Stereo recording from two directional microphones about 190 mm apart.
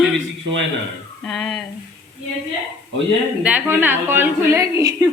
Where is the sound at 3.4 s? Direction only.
10° right (ahead or behind).